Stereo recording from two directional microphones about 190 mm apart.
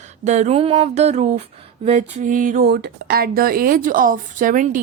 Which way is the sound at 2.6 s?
60° right (ahead or behind).